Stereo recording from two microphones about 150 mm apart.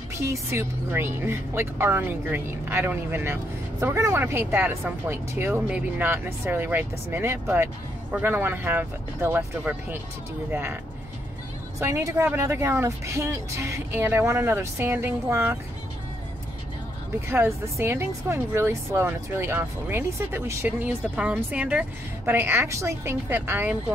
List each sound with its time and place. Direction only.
0.1 s speech: 20° right (ahead or behind)
11.8 s speech: 15° right (ahead or behind)
17.3 s speech: 15° right (ahead or behind)